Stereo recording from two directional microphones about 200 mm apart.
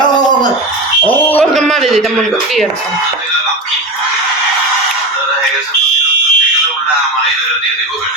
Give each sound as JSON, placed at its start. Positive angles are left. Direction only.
{"t": 1.0, "sound": "speech", "side_deg": 10}